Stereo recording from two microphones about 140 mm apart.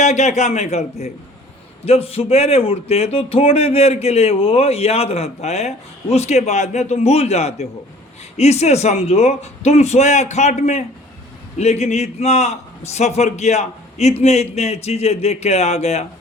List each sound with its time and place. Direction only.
0.0 s a man's voice: 55° left (ahead or behind)